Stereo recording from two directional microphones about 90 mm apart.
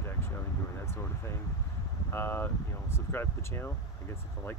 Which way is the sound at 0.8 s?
30° left (ahead or behind).